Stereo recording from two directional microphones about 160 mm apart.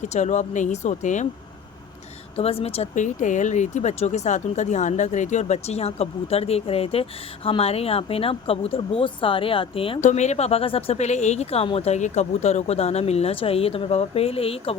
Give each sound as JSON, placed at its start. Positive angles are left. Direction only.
{"t": 0.1, "sound": "speech", "side_deg": 45}
{"t": 2.3, "sound": "speech", "side_deg": 35}
{"t": 10.0, "sound": "speech", "side_deg": 50}